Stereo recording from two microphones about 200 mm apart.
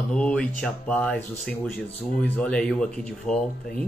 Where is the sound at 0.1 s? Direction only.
5° left (ahead or behind).